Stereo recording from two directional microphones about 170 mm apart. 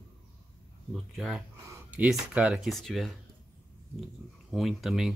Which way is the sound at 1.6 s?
15° right (ahead or behind).